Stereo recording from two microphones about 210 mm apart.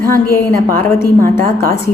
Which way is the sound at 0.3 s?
10° left (ahead or behind).